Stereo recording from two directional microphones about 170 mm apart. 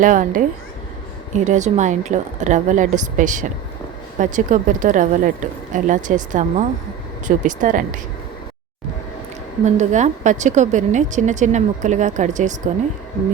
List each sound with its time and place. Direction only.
0.0 s a woman's voice: 50° right (ahead or behind)
9.6 s a woman's voice: 45° right (ahead or behind)